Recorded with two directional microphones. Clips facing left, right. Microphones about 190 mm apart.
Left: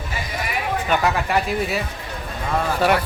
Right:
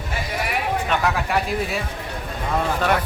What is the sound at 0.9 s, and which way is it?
Speech, centre (ahead or behind).